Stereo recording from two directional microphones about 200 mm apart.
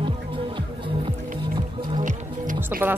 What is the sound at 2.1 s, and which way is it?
Music, 40° right (ahead or behind).